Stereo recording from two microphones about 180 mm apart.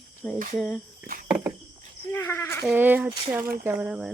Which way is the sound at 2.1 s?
10° left (ahead or behind).